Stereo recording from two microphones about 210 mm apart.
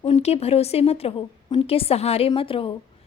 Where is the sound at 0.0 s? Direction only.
25° left (ahead or behind).